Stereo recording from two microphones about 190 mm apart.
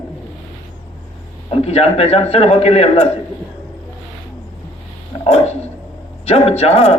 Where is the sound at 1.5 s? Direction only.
30° left (ahead or behind).